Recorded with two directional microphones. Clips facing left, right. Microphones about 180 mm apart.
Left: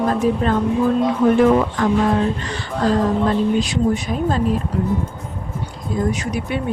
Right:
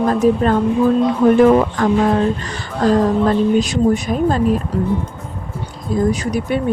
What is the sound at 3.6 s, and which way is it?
Speech, 45° right (ahead or behind).